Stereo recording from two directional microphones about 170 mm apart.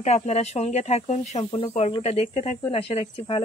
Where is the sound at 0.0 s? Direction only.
40° left (ahead or behind).